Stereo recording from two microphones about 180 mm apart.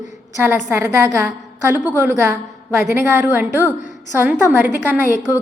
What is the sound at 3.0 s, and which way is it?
Speech, 10° right (ahead or behind).